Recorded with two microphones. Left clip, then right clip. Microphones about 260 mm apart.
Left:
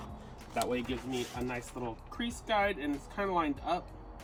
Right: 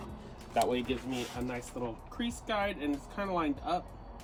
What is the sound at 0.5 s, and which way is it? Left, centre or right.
Speech, centre.